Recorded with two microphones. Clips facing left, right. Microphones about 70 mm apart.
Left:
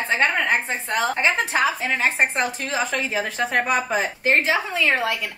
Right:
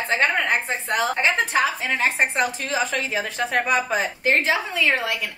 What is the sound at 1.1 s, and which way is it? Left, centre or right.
A woman's voice, centre.